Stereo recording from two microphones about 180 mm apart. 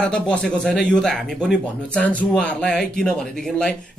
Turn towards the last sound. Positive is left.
turn(degrees=5)  # may be behind; listen again after turning